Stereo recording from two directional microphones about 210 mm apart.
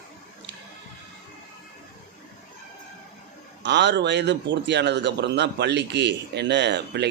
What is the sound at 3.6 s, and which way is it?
A man's voice, 55° right (ahead or behind).